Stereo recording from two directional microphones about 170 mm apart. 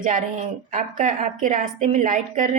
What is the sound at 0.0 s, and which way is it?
A woman's voice, 50° right (ahead or behind).